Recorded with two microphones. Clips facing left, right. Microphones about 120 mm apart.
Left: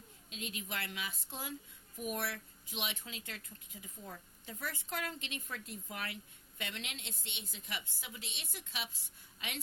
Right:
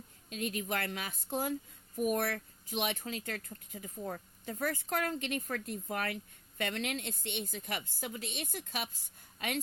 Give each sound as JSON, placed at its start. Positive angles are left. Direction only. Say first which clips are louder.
{"t": 0.3, "sound": "a woman's voice", "louder": "right 9 dB", "side_deg": -50}